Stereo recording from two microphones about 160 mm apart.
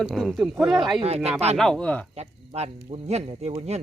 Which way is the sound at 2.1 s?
40° right (ahead or behind).